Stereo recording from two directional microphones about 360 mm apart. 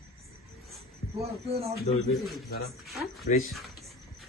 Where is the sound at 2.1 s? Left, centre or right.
Centre.